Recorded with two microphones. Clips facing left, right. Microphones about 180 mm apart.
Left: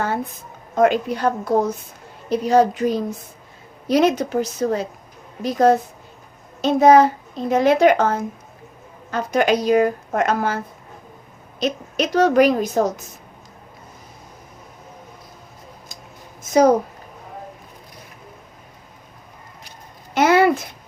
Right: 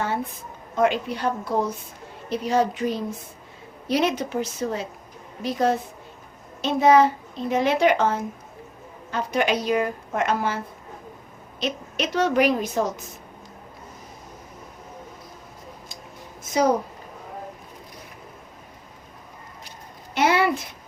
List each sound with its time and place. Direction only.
0.8 s a woman's voice: 45° left (ahead or behind)
11.6 s a woman's voice: 40° left (ahead or behind)
20.1 s speech: 45° left (ahead or behind)